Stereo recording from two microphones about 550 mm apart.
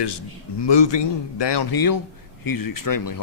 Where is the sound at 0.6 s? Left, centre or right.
Left.